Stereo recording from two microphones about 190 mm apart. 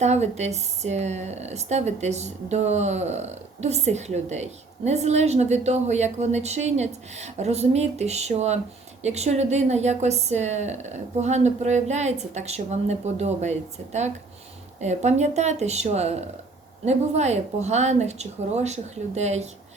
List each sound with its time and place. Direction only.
0.0 s speech: 35° right (ahead or behind)